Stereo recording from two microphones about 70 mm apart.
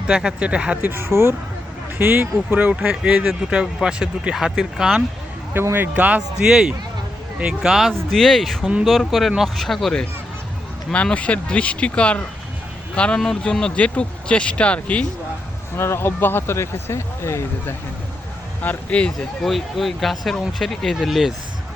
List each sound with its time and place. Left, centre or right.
0.1 s speech: centre
0.9 s speech: right
3.2 s speech: centre
5.7 s speech: right
6.4 s speech: centre
8.6 s speech: centre
8.9 s speech: centre
10.9 s speech: centre
15.8 s speech: left
18.6 s speech: left
19.5 s speech: centre